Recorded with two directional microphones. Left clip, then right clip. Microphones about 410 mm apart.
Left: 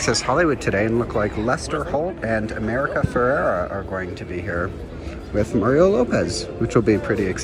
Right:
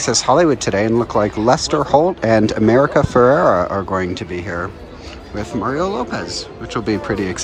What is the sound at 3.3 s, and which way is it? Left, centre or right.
Speech, right.